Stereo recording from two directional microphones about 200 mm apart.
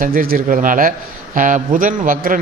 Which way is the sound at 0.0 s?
45° right (ahead or behind).